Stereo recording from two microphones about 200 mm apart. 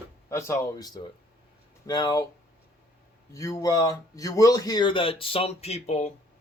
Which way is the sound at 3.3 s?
15° left (ahead or behind).